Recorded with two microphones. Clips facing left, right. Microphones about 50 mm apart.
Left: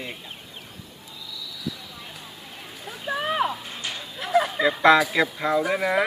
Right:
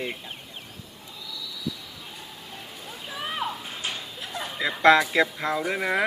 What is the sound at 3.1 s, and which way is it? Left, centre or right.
Music, left.